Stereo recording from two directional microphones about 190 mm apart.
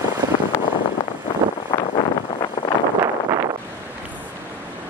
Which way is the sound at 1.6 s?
25° left (ahead or behind).